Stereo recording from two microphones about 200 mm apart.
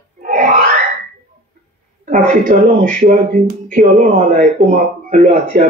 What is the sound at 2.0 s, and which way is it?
Speech, 40° right (ahead or behind).